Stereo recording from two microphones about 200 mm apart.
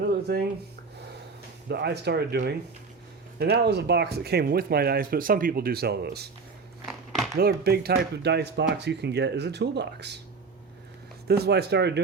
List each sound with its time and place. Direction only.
0.1 s a sound: 50° right (ahead or behind)
1.7 s speech: 55° right (ahead or behind)
7.3 s speech: 50° right (ahead or behind)
11.3 s speech: 55° right (ahead or behind)